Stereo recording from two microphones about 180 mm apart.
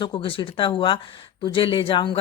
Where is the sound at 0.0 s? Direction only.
30° left (ahead or behind).